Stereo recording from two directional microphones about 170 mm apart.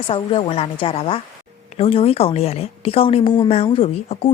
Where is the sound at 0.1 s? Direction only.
30° left (ahead or behind).